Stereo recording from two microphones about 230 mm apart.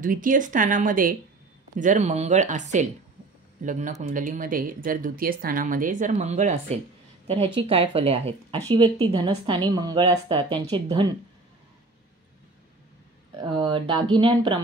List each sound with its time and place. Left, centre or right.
0.0 s a woman's voice: right; by 11.1 s centre
13.4 s a woman's voice: centre